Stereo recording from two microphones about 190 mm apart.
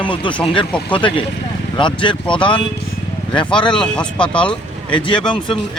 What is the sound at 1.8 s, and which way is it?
Speech, 25° left (ahead or behind).